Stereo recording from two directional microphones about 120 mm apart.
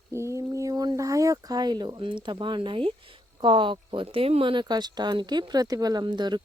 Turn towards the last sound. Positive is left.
turn(degrees=-40)  # may be behind; listen again after turning